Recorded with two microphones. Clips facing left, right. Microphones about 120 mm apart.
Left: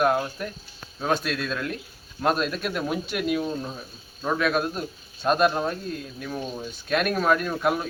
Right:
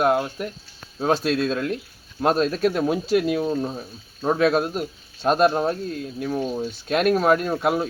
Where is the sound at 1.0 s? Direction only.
30° right (ahead or behind).